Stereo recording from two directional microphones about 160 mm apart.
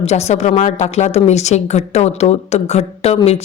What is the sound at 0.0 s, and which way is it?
A woman's voice, 40° left (ahead or behind).